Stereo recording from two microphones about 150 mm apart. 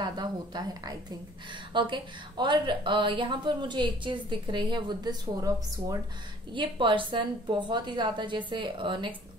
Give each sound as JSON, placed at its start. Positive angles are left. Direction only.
{"t": 0.0, "sound": "a woman's voice", "side_deg": -30}